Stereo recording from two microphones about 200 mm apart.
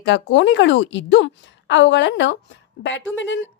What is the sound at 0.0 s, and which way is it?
A woman's voice, 65° left (ahead or behind).